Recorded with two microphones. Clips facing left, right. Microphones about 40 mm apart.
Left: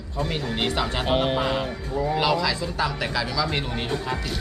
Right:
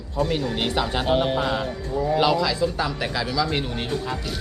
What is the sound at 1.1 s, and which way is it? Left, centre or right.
Speech, centre.